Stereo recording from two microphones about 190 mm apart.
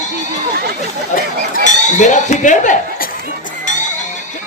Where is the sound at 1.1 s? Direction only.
45° left (ahead or behind).